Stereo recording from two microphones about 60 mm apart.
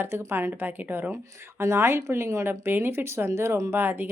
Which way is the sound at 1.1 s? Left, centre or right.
Right.